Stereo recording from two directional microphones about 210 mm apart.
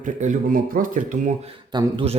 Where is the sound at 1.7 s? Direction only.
25° right (ahead or behind).